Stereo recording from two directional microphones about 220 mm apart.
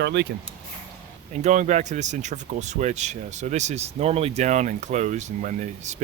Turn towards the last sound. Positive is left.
turn(degrees=-35)  # may be behind; listen again after turning